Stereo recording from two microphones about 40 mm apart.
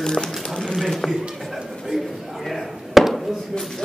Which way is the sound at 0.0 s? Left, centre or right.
Centre.